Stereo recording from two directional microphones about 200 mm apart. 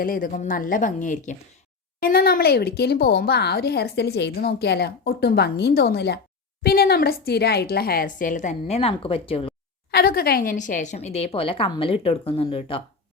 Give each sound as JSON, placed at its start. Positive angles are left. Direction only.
{"t": 0.0, "sound": "a woman's voice", "side_deg": 45}
{"t": 9.9, "sound": "a woman's voice", "side_deg": 50}